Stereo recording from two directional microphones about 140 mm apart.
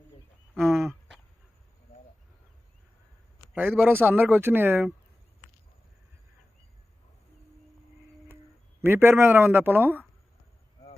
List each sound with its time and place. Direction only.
0.5 s a sound: centre (ahead or behind)
3.5 s speech: 15° right (ahead or behind)
8.8 s speech: 15° right (ahead or behind)